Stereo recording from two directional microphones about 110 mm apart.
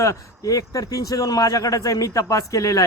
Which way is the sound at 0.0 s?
30° left (ahead or behind).